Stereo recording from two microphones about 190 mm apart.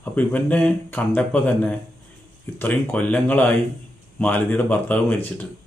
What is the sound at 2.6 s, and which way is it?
Mantra, 10° left (ahead or behind).